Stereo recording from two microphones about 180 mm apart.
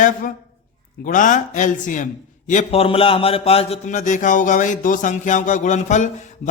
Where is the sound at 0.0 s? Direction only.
50° left (ahead or behind).